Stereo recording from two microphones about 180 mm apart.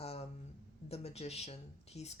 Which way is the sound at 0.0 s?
35° left (ahead or behind).